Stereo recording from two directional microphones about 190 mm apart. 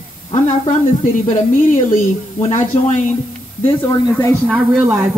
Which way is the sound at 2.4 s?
40° left (ahead or behind).